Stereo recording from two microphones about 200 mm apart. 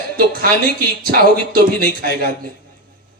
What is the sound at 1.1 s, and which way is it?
Music, 50° right (ahead or behind).